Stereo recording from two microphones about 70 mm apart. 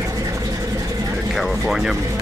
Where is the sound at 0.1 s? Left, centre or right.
Right.